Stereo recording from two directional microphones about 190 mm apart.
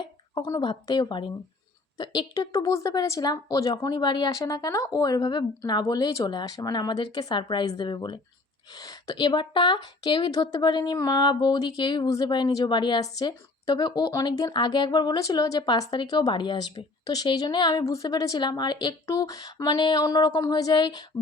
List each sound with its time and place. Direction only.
0.6 s a woman's voice: 25° left (ahead or behind)